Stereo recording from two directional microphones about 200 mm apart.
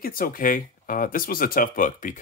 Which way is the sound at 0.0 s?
45° left (ahead or behind).